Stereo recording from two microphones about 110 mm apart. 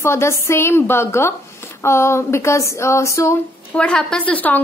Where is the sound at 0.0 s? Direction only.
25° left (ahead or behind).